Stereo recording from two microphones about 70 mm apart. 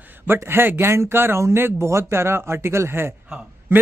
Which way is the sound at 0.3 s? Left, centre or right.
Right.